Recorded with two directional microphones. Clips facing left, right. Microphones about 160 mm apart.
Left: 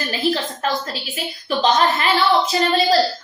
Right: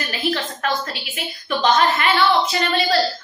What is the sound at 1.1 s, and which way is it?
A woman's voice, 30° left (ahead or behind).